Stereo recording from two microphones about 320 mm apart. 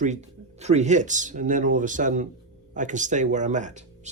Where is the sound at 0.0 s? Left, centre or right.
Right.